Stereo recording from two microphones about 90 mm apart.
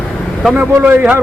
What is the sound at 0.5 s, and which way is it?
Speech, 15° right (ahead or behind).